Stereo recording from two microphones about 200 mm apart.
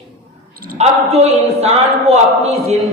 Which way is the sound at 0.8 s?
30° right (ahead or behind).